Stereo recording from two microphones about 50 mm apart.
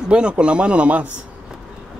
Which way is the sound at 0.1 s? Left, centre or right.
Right.